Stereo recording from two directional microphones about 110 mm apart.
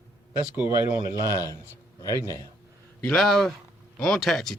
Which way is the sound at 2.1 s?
30° left (ahead or behind).